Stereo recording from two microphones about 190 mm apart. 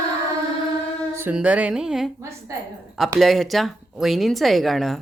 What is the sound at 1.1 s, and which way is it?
Speech, 10° right (ahead or behind).